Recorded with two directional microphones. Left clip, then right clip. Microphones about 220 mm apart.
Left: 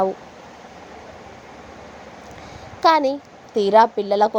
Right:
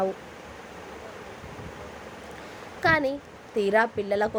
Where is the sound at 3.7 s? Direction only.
20° left (ahead or behind).